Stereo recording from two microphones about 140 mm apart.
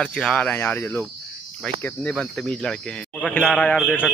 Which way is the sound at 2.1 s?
5° left (ahead or behind).